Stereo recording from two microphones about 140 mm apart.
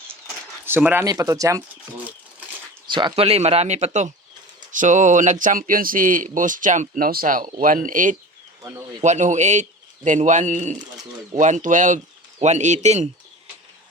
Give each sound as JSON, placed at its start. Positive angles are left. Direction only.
{"t": 0.1, "sound": "a sound", "side_deg": -15}
{"t": 1.0, "sound": "speech", "side_deg": -25}
{"t": 3.2, "sound": "speech", "side_deg": -45}
{"t": 9.0, "sound": "speech", "side_deg": -55}